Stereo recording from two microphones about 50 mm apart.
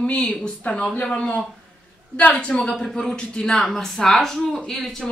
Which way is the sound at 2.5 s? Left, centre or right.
Centre.